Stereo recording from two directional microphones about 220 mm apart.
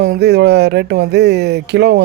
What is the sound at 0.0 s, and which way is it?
Speech, 45° right (ahead or behind).